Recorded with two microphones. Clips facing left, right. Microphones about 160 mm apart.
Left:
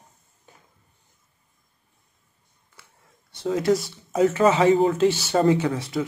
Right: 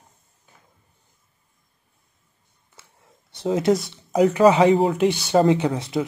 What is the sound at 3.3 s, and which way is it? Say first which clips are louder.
Speech: right 2 dB; 20° right (ahead or behind).